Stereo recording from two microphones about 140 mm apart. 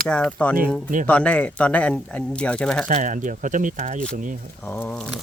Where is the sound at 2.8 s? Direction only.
65° right (ahead or behind).